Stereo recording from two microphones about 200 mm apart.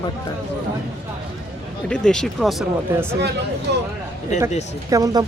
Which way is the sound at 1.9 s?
5° left (ahead or behind).